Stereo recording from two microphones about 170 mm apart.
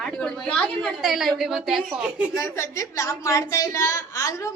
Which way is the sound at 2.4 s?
15° left (ahead or behind).